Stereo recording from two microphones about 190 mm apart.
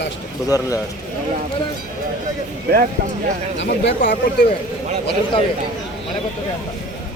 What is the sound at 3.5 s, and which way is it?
Speech, 70° left (ahead or behind).